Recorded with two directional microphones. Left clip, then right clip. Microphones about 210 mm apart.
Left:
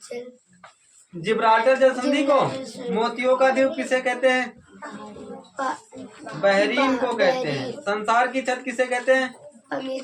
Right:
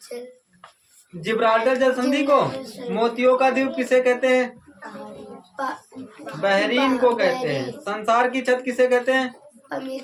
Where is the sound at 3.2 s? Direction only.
45° right (ahead or behind).